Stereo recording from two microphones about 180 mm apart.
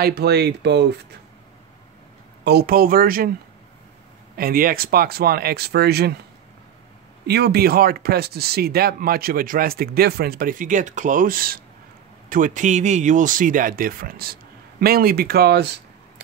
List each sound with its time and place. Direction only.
0.0 s speech: 65° right (ahead or behind)
2.4 s speech: 60° right (ahead or behind)
4.4 s speech: 55° right (ahead or behind)
7.2 s speech: 65° right (ahead or behind)